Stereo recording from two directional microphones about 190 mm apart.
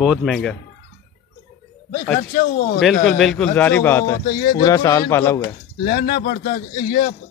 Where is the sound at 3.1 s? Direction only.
Centre (ahead or behind).